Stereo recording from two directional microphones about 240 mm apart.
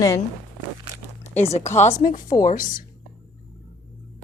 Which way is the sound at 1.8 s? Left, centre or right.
Left.